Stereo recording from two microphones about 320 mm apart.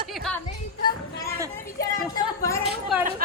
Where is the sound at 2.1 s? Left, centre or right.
Centre.